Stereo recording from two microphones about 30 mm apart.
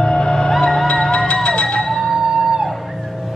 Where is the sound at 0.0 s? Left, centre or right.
Left.